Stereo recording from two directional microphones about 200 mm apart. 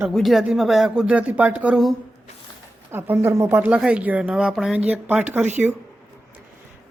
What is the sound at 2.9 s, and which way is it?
Speech, 10° right (ahead or behind).